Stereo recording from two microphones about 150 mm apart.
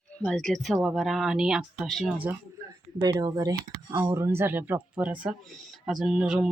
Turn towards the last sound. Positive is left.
turn(degrees=-5)  # may be behind; listen again after turning